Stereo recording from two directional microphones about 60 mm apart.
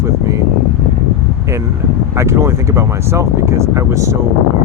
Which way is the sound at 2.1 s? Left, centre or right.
Right.